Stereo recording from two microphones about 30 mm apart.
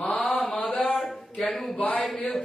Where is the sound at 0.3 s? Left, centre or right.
Left.